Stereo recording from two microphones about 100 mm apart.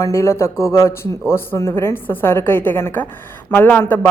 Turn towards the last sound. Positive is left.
turn(degrees=20)  # may be behind; listen again after turning